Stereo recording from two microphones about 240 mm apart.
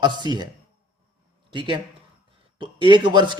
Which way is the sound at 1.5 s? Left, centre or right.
Right.